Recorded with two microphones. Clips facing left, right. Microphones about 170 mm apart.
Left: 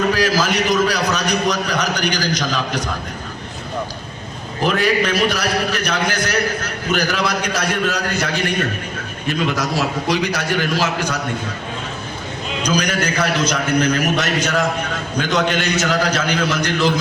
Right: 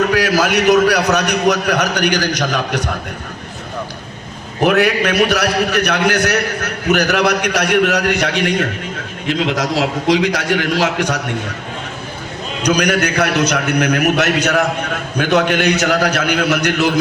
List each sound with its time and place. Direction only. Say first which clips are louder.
0.1 s a man's voice: right 3 dB; 65° right (ahead or behind)
4.6 s a man's voice: right 4 dB; 70° right (ahead or behind)
12.6 s a man's voice: right 5 dB; 70° right (ahead or behind)